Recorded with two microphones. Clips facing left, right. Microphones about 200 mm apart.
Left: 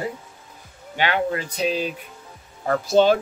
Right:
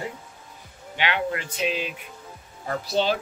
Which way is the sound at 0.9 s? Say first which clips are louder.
Left 4 dB; 40° left (ahead or behind).